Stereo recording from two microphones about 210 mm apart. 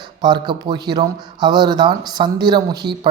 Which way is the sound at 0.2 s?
20° right (ahead or behind).